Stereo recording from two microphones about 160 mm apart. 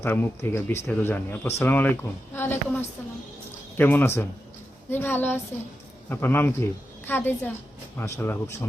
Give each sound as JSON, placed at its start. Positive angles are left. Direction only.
{"t": 0.0, "sound": "speech", "side_deg": 15}